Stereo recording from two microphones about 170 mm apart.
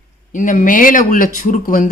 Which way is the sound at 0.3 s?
50° left (ahead or behind).